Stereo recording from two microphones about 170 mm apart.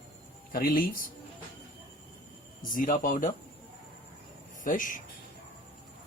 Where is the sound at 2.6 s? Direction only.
50° left (ahead or behind).